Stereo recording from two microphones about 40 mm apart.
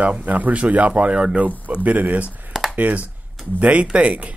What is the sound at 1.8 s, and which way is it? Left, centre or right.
A man's voice, right.